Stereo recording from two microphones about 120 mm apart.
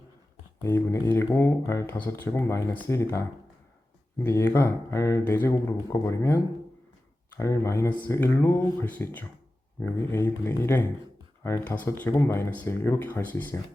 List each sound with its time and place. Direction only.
0.6 s speech: 20° left (ahead or behind)